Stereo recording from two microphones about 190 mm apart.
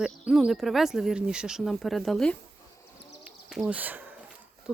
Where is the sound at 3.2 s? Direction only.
5° right (ahead or behind).